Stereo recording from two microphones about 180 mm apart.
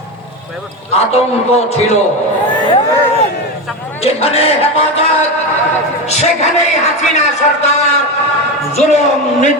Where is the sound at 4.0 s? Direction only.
35° left (ahead or behind).